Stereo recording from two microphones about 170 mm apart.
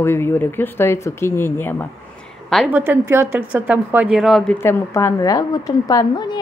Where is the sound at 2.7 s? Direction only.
10° right (ahead or behind).